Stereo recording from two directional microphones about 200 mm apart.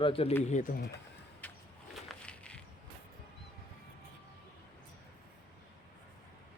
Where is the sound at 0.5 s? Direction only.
45° left (ahead or behind).